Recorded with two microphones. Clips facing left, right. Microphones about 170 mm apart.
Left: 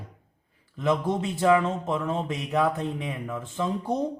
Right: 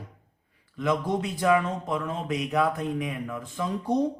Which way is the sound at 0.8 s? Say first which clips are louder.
Left 1 dB; 25° left (ahead or behind).